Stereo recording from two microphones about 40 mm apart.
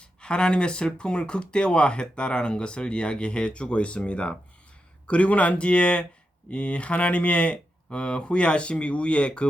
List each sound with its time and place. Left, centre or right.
0.0 s speech: left